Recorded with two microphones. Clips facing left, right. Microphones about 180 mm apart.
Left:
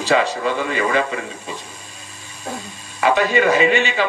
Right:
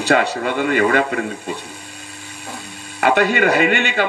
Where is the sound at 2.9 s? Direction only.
60° right (ahead or behind).